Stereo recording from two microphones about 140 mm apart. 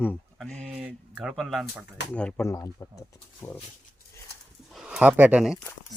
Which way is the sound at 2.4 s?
20° left (ahead or behind).